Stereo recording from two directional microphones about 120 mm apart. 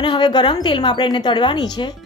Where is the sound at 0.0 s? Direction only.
40° left (ahead or behind).